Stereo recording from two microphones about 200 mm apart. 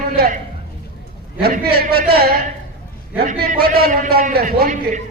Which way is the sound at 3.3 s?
45° right (ahead or behind).